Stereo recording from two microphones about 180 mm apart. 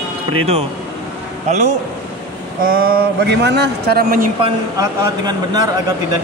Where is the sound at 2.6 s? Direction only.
55° right (ahead or behind).